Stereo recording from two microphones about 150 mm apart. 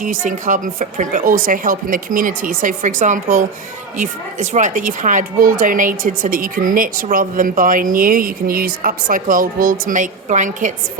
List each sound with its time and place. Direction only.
0.0 s speech: 60° right (ahead or behind)